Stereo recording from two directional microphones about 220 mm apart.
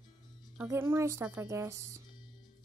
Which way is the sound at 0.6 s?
10° right (ahead or behind).